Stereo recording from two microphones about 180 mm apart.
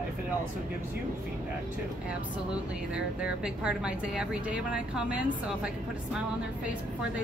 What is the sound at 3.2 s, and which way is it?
A woman's voice, 5° right (ahead or behind).